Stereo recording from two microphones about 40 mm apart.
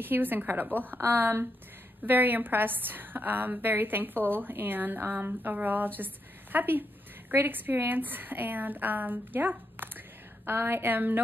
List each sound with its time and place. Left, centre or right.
0.0 s a woman's voice: right
2.0 s a woman's voice: right
10.4 s a woman's voice: right